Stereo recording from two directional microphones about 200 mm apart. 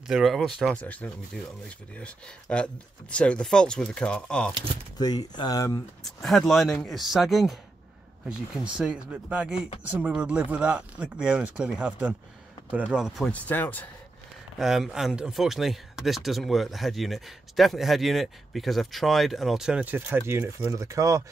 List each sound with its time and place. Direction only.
0.1 s speech: centre (ahead or behind)
4.9 s speech: 20° left (ahead or behind)
6.0 s speech: centre (ahead or behind)
14.6 s speech: centre (ahead or behind)